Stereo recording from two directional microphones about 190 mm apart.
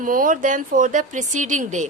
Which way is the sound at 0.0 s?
45° right (ahead or behind).